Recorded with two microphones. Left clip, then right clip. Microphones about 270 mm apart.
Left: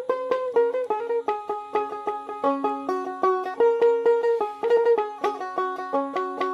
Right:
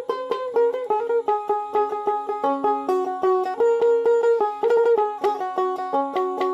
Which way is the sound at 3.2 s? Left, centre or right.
Right.